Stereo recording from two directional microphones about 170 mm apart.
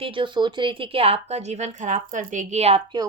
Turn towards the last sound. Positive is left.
turn(degrees=-30)  # may be behind; listen again after turning